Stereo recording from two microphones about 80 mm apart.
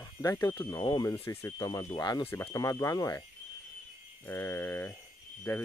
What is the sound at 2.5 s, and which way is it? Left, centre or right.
Speech, left.